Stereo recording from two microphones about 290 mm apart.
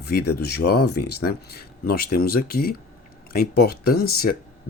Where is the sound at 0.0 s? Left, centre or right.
Left.